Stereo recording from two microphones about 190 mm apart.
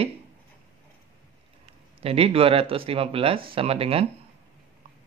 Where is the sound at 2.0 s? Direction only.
30° right (ahead or behind).